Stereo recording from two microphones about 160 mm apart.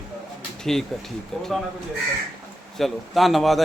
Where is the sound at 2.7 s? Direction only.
Centre (ahead or behind).